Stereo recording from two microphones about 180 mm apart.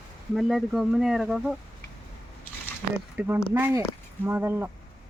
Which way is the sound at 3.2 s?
10° right (ahead or behind).